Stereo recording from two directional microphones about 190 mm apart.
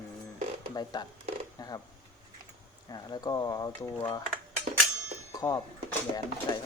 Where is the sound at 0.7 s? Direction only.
20° left (ahead or behind).